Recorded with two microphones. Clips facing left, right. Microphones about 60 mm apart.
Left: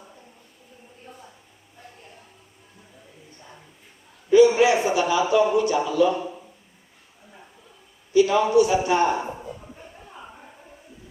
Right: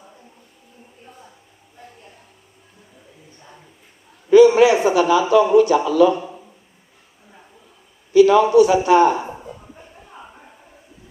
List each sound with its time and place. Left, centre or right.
4.3 s a man's voice: right
8.1 s a man's voice: right